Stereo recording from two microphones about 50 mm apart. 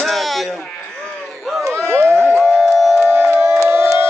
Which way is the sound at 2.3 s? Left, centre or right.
Centre.